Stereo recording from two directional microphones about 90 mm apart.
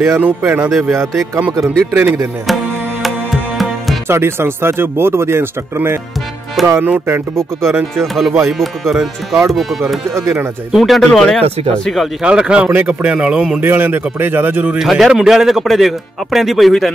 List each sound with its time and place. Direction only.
0.2 s speech: 20° right (ahead or behind)
0.7 s a man's voice: centre (ahead or behind)
0.9 s speech: 35° right (ahead or behind)
2.4 s music: centre (ahead or behind)
4.1 s speech: 25° right (ahead or behind)
6.6 s a man's voice: centre (ahead or behind)
6.9 s speech: 30° right (ahead or behind)
8.0 s a man's voice: centre (ahead or behind)
10.1 s speech: 30° right (ahead or behind)
10.7 s a man's voice: centre (ahead or behind)
12.2 s speech: 10° right (ahead or behind)
12.7 s speech: 20° right (ahead or behind)
13.6 s speech: 25° right (ahead or behind)
14.8 s a man's voice: 5° right (ahead or behind)